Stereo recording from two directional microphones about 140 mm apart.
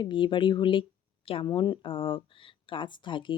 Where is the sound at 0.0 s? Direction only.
35° left (ahead or behind).